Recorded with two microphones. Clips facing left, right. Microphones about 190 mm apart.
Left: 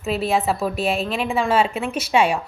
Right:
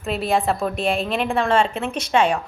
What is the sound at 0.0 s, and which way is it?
A woman's voice, centre (ahead or behind).